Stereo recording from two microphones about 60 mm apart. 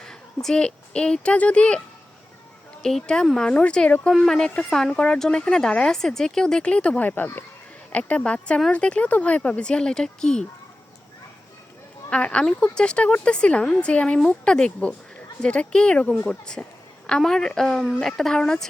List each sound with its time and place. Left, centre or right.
0.4 s speech: centre
2.8 s speech: centre
12.1 s speech: centre